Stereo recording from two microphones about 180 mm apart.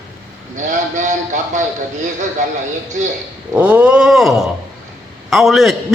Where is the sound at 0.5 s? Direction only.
45° right (ahead or behind).